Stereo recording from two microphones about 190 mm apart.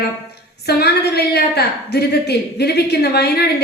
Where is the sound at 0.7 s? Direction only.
60° left (ahead or behind).